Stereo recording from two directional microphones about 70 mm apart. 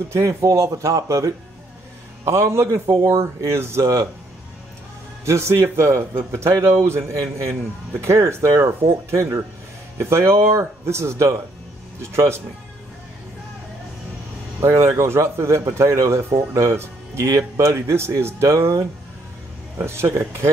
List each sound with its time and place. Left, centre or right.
0.1 s speech: right
5.2 s speech: right
6.9 s speech: right
14.8 s speech: right
17.3 s speech: right